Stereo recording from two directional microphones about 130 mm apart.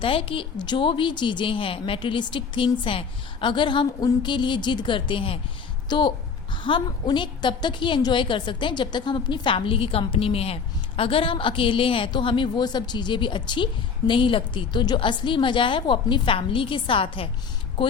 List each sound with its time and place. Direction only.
0.0 s a woman's voice: 45° left (ahead or behind)